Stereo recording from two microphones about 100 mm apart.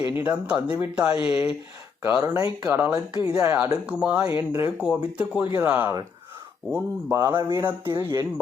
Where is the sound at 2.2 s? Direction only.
35° right (ahead or behind).